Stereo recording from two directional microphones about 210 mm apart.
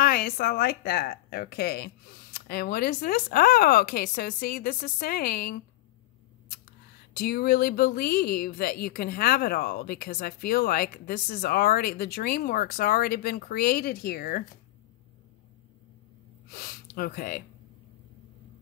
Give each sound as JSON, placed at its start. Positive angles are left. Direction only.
{"t": 0.0, "sound": "speech", "side_deg": 45}
{"t": 7.2, "sound": "speech", "side_deg": 45}
{"t": 16.4, "sound": "a sound", "side_deg": 45}